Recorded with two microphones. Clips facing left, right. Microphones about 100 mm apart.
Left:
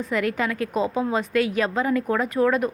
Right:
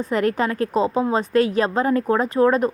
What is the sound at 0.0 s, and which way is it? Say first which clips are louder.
A woman's voice: right 4 dB; 35° right (ahead or behind).